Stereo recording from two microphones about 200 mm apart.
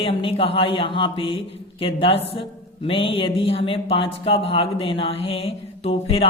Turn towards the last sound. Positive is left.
turn(degrees=30)  # may be behind; listen again after turning